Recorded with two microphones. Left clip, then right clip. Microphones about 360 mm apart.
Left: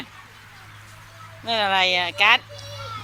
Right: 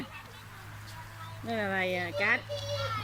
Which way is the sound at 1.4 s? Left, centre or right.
Left.